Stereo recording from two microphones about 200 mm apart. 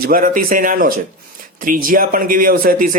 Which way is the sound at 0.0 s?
45° right (ahead or behind).